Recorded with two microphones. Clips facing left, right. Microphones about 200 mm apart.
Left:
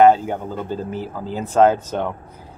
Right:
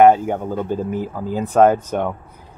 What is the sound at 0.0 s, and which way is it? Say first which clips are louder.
Speech: right 1 dB; 10° right (ahead or behind).